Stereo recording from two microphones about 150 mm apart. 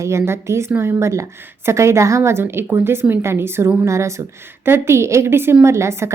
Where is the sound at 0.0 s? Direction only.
20° right (ahead or behind).